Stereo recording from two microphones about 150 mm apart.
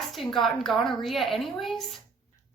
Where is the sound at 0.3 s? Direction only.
Centre (ahead or behind).